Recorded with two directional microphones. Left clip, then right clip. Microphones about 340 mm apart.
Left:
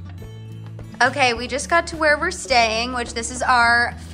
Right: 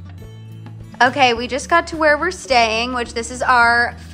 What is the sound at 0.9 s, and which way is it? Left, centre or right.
A woman's voice, centre.